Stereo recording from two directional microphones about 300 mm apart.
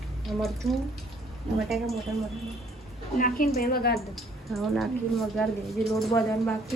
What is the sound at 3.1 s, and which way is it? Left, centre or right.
Speech, left.